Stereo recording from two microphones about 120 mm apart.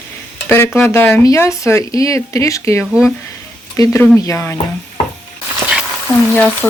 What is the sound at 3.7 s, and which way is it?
Speech, 25° left (ahead or behind).